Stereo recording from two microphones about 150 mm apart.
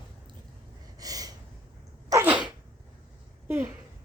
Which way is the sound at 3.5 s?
15° right (ahead or behind).